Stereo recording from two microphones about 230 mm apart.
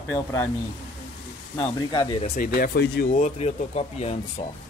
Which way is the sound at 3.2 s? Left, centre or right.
Left.